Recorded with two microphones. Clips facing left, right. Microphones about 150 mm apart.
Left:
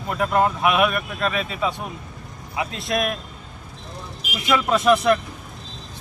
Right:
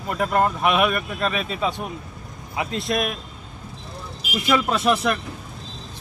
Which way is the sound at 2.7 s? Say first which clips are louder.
Even; centre (ahead or behind).